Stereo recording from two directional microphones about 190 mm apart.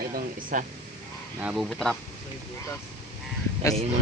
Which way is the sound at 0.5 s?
40° right (ahead or behind).